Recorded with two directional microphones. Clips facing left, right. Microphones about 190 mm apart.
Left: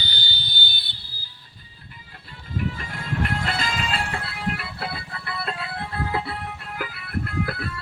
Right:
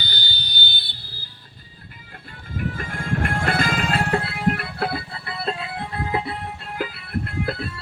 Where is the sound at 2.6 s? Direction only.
50° right (ahead or behind).